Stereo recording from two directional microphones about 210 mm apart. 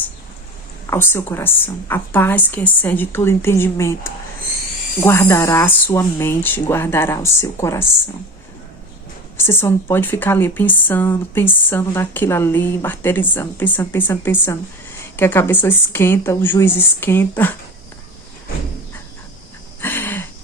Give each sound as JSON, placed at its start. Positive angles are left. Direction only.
{"t": 0.9, "sound": "speech", "side_deg": 10}
{"t": 9.4, "sound": "speech", "side_deg": 10}
{"t": 19.8, "sound": "a sound", "side_deg": 10}